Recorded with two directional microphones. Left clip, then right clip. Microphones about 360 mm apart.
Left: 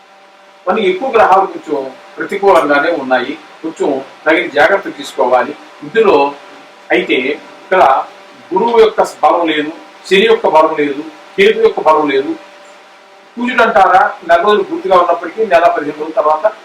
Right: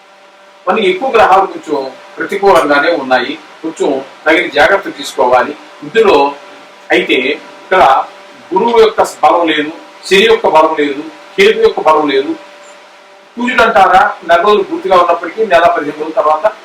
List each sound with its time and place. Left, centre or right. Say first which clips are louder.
0.6 s a man's voice: right 2 dB; centre
3.8 s speech: right 2 dB; left
4.5 s speech: right 1 dB; centre
6.9 s speech: right 2 dB; centre
9.4 s a man's voice: right 2 dB; centre
10.4 s speech: right 1 dB; centre
11.6 s speech: right 1 dB; centre
13.4 s speech: right 1 dB; centre